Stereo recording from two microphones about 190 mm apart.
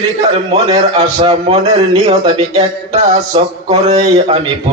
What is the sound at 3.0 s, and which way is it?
A man's voice, 35° right (ahead or behind).